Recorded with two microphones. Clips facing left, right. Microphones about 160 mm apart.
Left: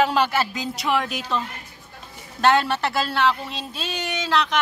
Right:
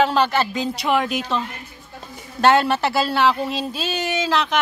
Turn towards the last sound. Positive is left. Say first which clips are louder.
# right 2 dB
turn(degrees=-5)  # may be behind; listen again after turning